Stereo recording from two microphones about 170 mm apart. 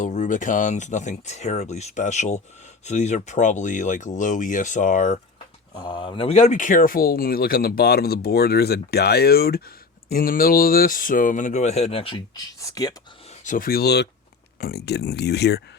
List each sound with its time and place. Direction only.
0.0 s speech: 45° left (ahead or behind)
5.7 s speech: 25° left (ahead or behind)
12.5 s speech: 20° left (ahead or behind)
13.4 s speech: 50° left (ahead or behind); by 15.6 s 75° left (ahead or behind)